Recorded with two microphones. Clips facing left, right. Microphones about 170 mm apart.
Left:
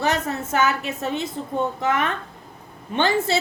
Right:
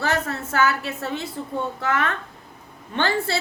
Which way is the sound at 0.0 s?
20° left (ahead or behind).